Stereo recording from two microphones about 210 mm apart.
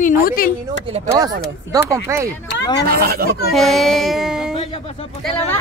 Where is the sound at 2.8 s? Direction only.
45° right (ahead or behind).